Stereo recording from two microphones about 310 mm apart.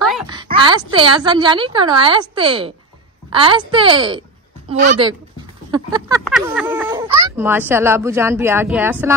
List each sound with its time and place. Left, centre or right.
0.3 s speech: centre
5.7 s a sound: centre
6.2 s speech: centre